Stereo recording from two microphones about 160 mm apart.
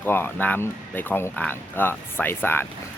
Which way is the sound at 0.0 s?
15° left (ahead or behind).